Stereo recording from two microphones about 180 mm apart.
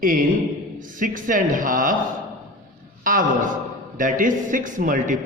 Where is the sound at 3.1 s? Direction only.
50° right (ahead or behind).